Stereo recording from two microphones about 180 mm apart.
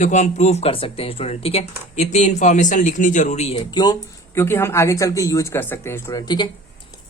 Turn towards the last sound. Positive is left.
turn(degrees=25)  # may be behind; listen again after turning